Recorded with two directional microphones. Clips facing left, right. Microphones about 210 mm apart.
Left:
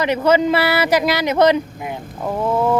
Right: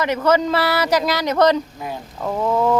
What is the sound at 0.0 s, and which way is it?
Speech, 15° left (ahead or behind).